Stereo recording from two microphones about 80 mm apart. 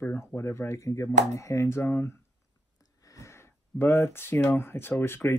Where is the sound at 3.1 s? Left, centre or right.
Left.